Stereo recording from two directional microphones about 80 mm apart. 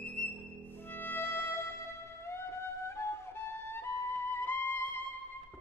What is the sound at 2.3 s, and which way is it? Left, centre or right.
Flute, left.